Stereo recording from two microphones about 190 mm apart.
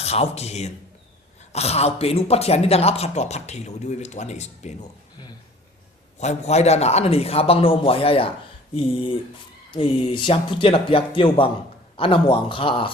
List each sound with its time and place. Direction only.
0.0 s speech: 35° left (ahead or behind)
6.1 s speech: 35° left (ahead or behind)